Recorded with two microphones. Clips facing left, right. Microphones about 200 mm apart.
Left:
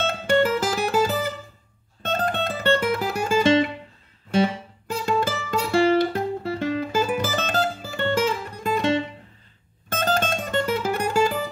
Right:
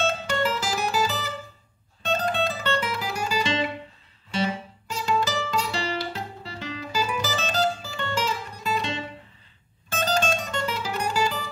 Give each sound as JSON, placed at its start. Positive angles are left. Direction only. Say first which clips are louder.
{"t": 0.0, "sound": "music", "louder": "left 5 dB", "side_deg": 55}